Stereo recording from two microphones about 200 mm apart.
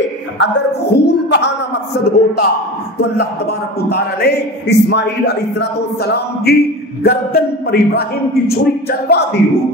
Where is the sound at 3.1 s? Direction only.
55° left (ahead or behind).